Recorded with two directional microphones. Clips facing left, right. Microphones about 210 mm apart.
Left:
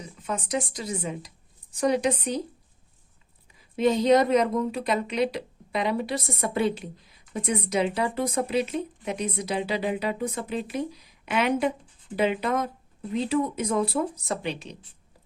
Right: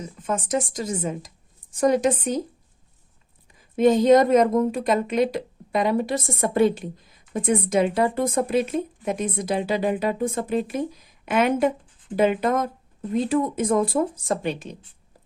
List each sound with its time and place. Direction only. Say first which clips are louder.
0.0 s speech: right 5 dB; 45° right (ahead or behind)
3.8 s speech: right 4 dB; 45° right (ahead or behind)